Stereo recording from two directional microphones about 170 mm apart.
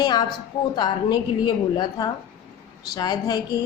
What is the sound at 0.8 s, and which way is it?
A woman's voice, 25° left (ahead or behind).